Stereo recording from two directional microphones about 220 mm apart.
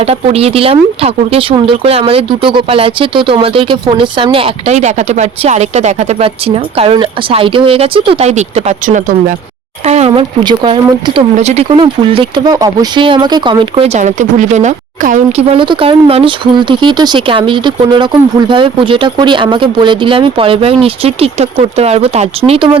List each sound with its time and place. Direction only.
0.1 s speech: 25° right (ahead or behind)
15.5 s speech: 20° right (ahead or behind)